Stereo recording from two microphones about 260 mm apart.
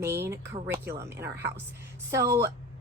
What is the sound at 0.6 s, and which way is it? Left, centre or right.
Speech, centre.